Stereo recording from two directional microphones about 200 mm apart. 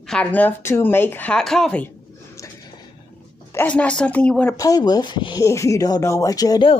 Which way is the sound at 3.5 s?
5° left (ahead or behind).